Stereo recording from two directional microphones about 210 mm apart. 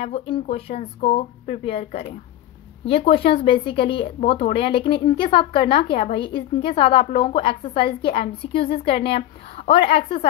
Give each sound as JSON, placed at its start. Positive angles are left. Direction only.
{"t": 0.0, "sound": "a woman's voice", "side_deg": 30}